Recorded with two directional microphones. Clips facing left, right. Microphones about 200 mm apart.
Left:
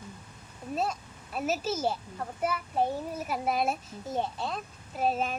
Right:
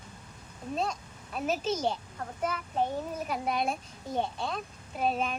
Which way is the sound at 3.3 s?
5° left (ahead or behind).